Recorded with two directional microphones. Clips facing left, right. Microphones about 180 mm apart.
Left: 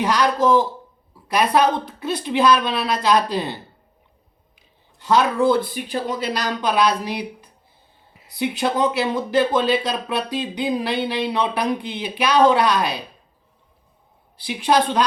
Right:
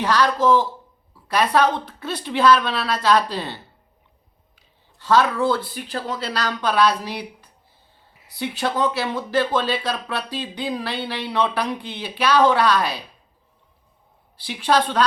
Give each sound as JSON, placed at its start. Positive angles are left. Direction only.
{"t": 0.0, "sound": "speech", "side_deg": 15}
{"t": 4.9, "sound": "speech", "side_deg": 15}
{"t": 14.3, "sound": "speech", "side_deg": 15}